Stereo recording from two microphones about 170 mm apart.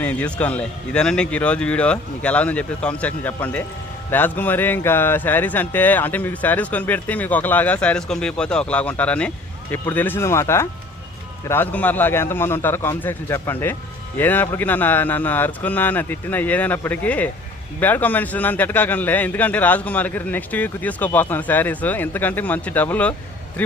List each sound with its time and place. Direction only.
0.0 s a man's voice: 10° left (ahead or behind)